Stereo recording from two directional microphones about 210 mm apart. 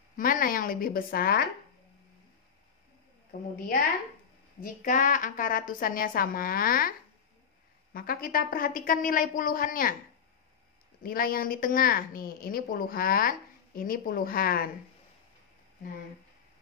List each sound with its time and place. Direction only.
0.1 s a woman's voice: 40° left (ahead or behind)
3.3 s a woman's voice: 45° left (ahead or behind)
11.0 s a woman's voice: 45° left (ahead or behind)